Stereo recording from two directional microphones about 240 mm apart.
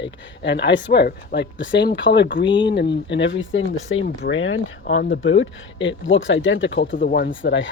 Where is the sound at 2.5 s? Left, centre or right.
Centre.